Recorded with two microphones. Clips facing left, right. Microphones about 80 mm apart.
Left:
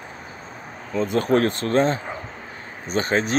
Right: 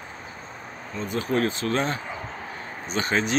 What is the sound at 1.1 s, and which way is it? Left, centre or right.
Speech, left.